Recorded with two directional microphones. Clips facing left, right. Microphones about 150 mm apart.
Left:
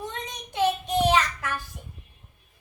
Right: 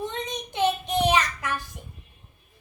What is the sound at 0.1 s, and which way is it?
Child singing, 20° right (ahead or behind).